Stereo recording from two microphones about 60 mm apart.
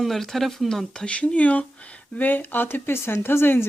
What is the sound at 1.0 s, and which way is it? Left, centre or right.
Speech, centre.